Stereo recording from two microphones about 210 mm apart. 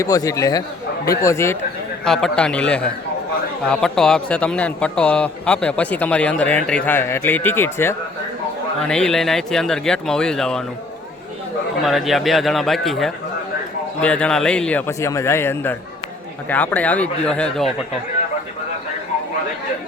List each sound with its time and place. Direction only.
0.0 s a man's voice: 15° left (ahead or behind)
2.0 s a man's voice: centre (ahead or behind)
11.8 s a man's voice: centre (ahead or behind)